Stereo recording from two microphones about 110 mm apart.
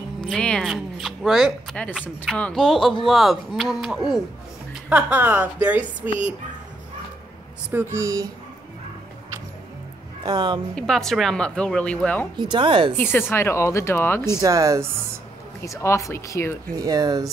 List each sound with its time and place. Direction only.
0.2 s speech: 5° left (ahead or behind)
2.6 s speech: centre (ahead or behind)
4.8 s a woman's voice: 15° right (ahead or behind)
7.7 s speech: 20° right (ahead or behind)
10.2 s speech: 40° right (ahead or behind)
10.7 s speech: 5° left (ahead or behind)
12.4 s speech: 45° right (ahead or behind)
12.9 s speech: 20° left (ahead or behind)
14.4 s speech: 30° right (ahead or behind)
15.6 s speech: 25° left (ahead or behind)
16.7 s speech: 35° right (ahead or behind)